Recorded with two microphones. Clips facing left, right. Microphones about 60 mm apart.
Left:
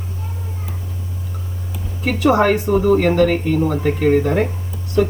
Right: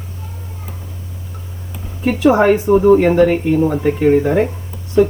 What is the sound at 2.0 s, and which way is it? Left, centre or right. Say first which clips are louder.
Speech: right 3 dB; centre.